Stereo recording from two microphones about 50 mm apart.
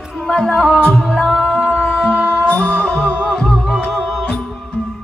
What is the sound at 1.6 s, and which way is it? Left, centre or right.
Music, left.